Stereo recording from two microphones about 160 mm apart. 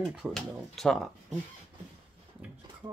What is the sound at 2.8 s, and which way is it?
Stir, 25° right (ahead or behind).